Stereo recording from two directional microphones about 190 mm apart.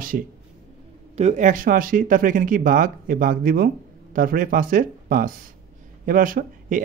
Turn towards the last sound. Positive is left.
turn(degrees=-45)  # may be behind; listen again after turning